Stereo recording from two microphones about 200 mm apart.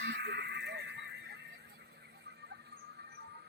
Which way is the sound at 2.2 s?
55° right (ahead or behind).